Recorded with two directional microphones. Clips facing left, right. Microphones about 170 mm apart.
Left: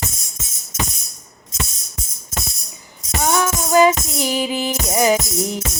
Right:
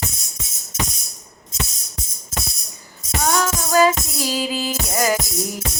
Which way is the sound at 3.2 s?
15° left (ahead or behind).